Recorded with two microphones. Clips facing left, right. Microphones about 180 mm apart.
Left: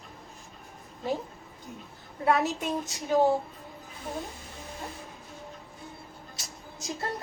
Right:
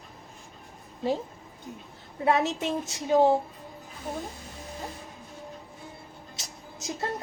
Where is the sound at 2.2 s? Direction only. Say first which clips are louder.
Right 1 dB; 25° right (ahead or behind).